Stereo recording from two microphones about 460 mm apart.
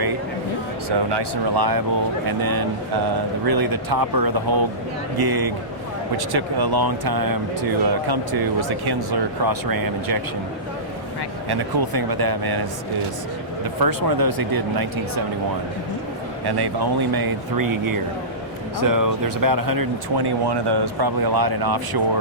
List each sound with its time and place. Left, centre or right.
0.9 s speech: right
11.4 s speech: right
13.8 s speech: right
16.5 s speech: right